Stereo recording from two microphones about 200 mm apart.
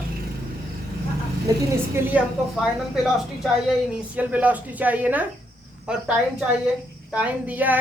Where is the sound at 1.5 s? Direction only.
15° right (ahead or behind).